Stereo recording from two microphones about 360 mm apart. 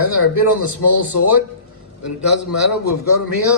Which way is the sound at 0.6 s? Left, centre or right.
Right.